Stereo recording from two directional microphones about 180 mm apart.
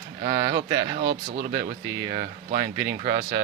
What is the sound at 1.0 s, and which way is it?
Speech, 65° right (ahead or behind).